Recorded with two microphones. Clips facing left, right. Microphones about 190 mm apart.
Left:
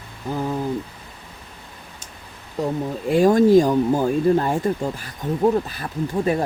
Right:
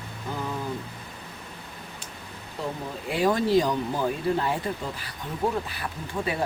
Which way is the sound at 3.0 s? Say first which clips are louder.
Left 9 dB; 45° left (ahead or behind).